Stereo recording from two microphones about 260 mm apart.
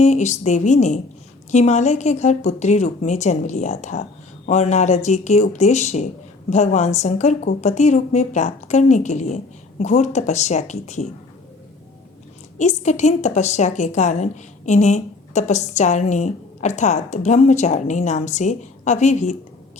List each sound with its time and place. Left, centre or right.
0.0 s a woman's voice: left
12.5 s a woman's voice: left